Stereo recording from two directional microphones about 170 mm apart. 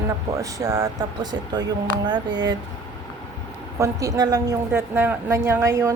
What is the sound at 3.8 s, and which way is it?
A woman's voice, 20° right (ahead or behind).